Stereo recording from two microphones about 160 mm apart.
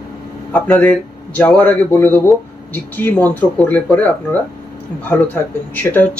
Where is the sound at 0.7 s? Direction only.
10° left (ahead or behind).